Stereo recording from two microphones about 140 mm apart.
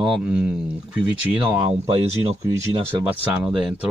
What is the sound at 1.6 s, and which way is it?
Speech, 45° right (ahead or behind).